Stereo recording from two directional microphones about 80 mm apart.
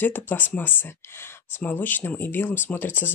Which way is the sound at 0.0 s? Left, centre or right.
Left.